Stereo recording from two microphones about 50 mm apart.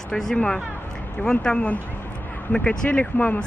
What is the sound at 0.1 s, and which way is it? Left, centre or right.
Speech, centre.